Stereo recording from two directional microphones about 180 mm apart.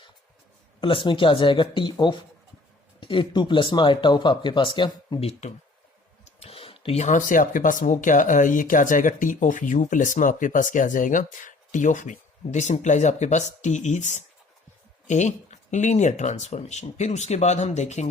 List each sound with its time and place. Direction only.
0.8 s speech: 30° left (ahead or behind)